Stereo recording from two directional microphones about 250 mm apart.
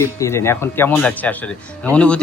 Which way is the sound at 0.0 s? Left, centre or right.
Centre.